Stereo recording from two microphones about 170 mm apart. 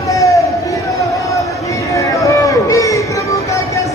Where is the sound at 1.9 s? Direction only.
20° left (ahead or behind).